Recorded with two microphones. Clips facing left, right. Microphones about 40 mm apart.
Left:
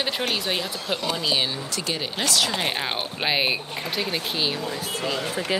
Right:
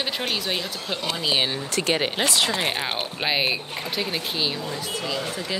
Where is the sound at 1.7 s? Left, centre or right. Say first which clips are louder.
Right 5 dB; right.